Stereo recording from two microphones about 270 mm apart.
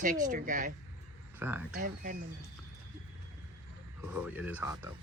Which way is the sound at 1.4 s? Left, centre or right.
Centre.